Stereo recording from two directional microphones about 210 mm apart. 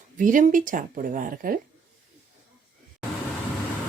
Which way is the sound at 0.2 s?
40° right (ahead or behind).